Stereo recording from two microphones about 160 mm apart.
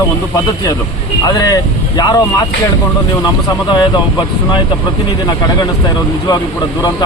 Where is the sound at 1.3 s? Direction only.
25° left (ahead or behind).